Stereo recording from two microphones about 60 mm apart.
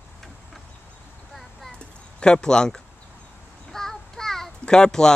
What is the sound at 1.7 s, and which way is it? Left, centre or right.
Clip-clop, centre.